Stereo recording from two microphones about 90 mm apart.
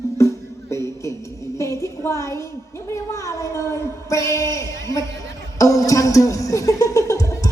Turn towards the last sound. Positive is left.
turn(degrees=35)  # may be behind; listen again after turning